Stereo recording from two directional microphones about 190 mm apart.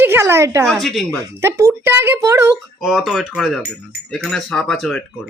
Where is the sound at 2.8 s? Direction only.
Centre (ahead or behind).